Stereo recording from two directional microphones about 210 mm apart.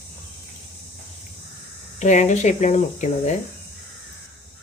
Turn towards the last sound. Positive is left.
turn(degrees=35)  # may be behind; listen again after turning